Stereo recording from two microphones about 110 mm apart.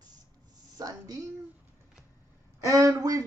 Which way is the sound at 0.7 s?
35° right (ahead or behind).